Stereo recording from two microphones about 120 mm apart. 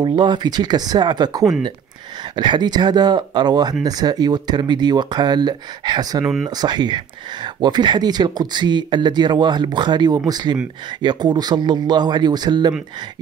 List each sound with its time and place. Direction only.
0.0 s speech: 40° right (ahead or behind)
6.2 s speech: 5° right (ahead or behind)
6.5 s speech: 35° right (ahead or behind)